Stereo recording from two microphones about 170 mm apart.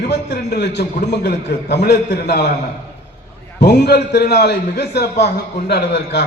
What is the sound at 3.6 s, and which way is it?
A man's voice, 75° left (ahead or behind).